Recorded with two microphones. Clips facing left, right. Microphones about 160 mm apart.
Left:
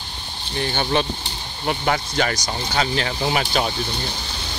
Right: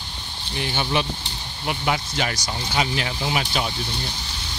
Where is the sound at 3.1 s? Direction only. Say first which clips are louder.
Left 3 dB; 45° left (ahead or behind).